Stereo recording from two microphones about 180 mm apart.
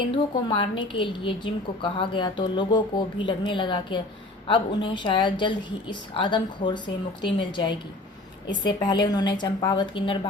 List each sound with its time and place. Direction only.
0.1 s a woman's voice: 25° left (ahead or behind)